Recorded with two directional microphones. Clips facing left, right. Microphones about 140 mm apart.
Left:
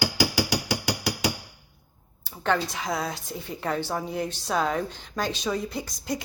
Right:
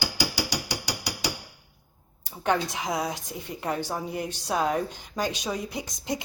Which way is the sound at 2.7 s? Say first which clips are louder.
Right 1 dB; 20° right (ahead or behind).